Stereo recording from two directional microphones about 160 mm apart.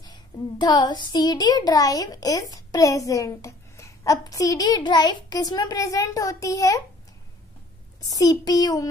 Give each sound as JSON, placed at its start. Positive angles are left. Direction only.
{"t": 0.0, "sound": "a child's voice", "side_deg": 25}
{"t": 8.0, "sound": "a child's voice", "side_deg": 25}